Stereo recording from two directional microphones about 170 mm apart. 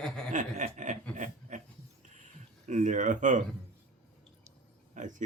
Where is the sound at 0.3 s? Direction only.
45° right (ahead or behind).